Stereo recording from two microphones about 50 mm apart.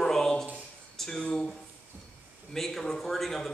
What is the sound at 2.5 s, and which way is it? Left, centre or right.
Speech, centre.